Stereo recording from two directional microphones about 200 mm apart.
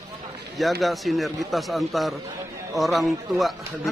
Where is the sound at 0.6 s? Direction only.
Centre (ahead or behind).